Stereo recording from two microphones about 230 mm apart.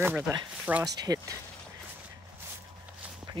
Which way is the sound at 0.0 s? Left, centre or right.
Centre.